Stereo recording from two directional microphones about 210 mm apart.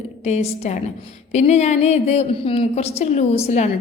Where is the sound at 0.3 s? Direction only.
30° left (ahead or behind).